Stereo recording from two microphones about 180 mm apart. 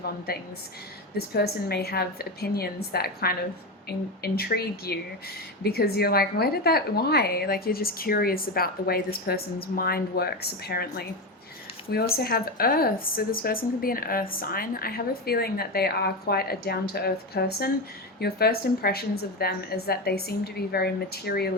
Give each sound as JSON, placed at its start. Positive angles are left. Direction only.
{"t": 0.3, "sound": "speech", "side_deg": 60}